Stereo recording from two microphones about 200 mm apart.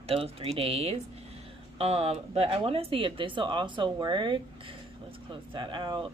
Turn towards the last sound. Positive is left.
turn(degrees=-25)  # may be behind; listen again after turning